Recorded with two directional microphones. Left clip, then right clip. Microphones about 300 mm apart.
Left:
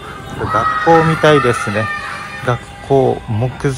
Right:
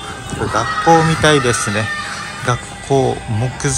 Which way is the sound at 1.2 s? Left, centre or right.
Centre.